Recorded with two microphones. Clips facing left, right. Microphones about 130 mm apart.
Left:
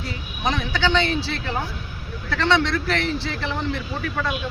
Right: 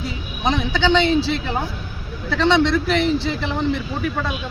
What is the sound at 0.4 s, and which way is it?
Speech, 20° right (ahead or behind).